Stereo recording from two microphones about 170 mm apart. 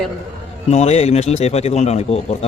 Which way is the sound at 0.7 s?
40° left (ahead or behind).